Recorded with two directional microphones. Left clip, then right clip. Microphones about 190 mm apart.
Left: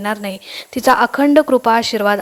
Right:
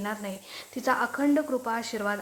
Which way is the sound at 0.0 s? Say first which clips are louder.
Left 12 dB; 40° left (ahead or behind).